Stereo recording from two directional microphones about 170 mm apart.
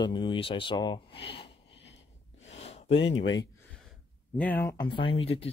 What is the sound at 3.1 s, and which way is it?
Speech, 90° left.